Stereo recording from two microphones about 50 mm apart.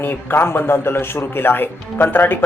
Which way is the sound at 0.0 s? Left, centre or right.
Left.